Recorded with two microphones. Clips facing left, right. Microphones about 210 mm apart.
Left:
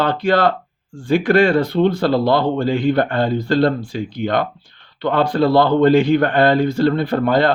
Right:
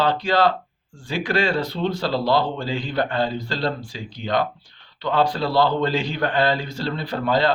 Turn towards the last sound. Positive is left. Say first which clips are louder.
# left 5 dB
turn(degrees=55)  # may be behind; listen again after turning